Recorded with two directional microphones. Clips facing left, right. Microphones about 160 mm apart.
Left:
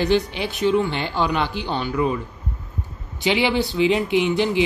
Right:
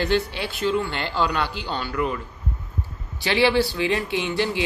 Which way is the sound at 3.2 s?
20° left (ahead or behind).